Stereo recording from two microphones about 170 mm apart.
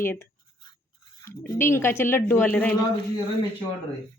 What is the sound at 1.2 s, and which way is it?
A woman's voice, 15° left (ahead or behind).